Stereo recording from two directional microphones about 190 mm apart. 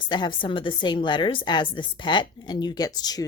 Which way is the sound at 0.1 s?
25° left (ahead or behind).